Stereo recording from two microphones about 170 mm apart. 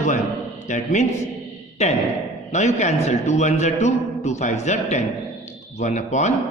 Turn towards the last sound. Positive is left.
turn(degrees=45)  # may be behind; listen again after turning